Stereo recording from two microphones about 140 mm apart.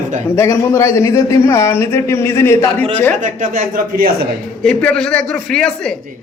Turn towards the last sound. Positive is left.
turn(degrees=5)  # may be behind; listen again after turning